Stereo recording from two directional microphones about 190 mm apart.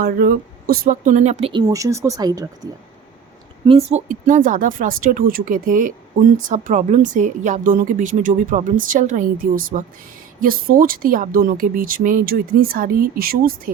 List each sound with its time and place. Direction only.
0.0 s a woman's voice: 50° right (ahead or behind); by 1.6 s 30° right (ahead or behind)
1.6 s speech: 15° right (ahead or behind)
3.7 s a woman's voice: 30° right (ahead or behind); by 13.6 s 50° right (ahead or behind)